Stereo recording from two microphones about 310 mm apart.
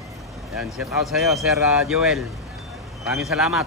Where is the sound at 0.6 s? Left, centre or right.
Centre.